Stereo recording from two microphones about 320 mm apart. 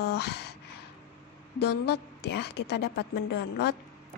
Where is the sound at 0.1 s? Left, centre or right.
Left.